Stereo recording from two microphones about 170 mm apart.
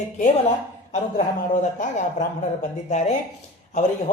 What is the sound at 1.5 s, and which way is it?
Speech, 45° left (ahead or behind).